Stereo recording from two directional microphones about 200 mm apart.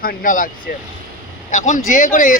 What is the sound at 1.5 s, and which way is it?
Speech, 35° left (ahead or behind).